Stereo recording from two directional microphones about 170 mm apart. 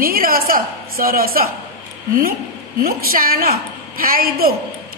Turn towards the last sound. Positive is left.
turn(degrees=-60)  # may be behind; listen again after turning